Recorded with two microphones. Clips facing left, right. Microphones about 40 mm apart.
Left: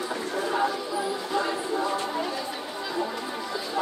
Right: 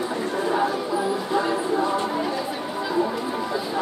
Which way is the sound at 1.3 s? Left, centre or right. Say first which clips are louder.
Right 4 dB; right.